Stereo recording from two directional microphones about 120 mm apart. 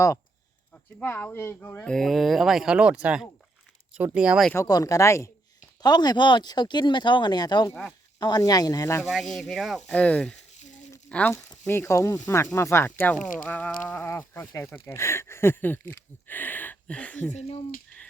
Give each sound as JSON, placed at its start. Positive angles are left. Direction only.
{"t": 0.7, "sound": "speech", "side_deg": 15}
{"t": 4.5, "sound": "speech", "side_deg": 30}
{"t": 5.8, "sound": "speech", "side_deg": 35}
{"t": 7.7, "sound": "speech", "side_deg": 5}
{"t": 8.2, "sound": "speech", "side_deg": 30}
{"t": 9.0, "sound": "speech", "side_deg": 0}
{"t": 10.6, "sound": "a sound", "side_deg": 85}
{"t": 11.1, "sound": "speech", "side_deg": 10}